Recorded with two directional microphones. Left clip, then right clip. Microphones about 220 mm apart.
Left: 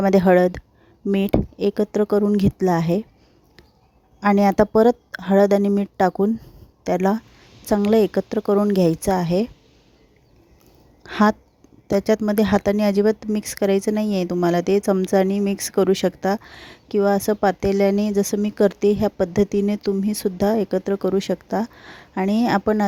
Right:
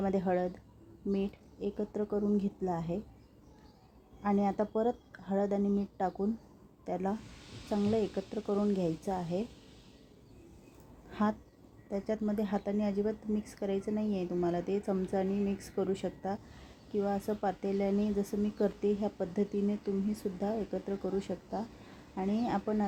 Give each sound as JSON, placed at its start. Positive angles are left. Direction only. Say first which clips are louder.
{"t": 0.0, "sound": "speech", "louder": "left 17 dB", "side_deg": 45}
{"t": 4.2, "sound": "speech", "louder": "left 15 dB", "side_deg": 50}
{"t": 11.1, "sound": "speech", "louder": "left 16 dB", "side_deg": 45}